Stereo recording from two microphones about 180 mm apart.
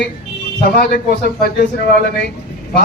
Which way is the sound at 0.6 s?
60° left (ahead or behind).